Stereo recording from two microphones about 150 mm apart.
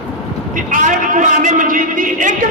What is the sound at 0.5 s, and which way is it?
A man's voice, 60° right (ahead or behind).